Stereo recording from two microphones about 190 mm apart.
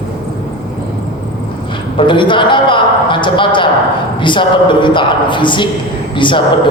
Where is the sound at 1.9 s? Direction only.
25° left (ahead or behind).